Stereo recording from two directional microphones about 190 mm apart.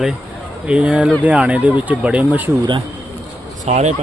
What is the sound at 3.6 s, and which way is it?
Speech, 35° right (ahead or behind).